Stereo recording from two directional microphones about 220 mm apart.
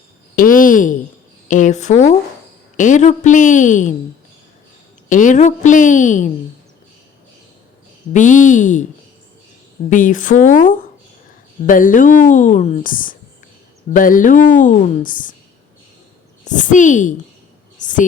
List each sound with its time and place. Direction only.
0.3 s speech: 40° left (ahead or behind)
5.0 s speech: 35° left (ahead or behind)
8.1 s speech: 35° left (ahead or behind)
9.9 s speech: 35° left (ahead or behind)
16.4 s a woman's voice: 35° left (ahead or behind)
17.7 s a sound: 35° left (ahead or behind)